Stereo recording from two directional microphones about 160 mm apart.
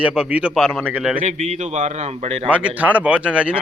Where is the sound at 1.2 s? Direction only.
45° right (ahead or behind).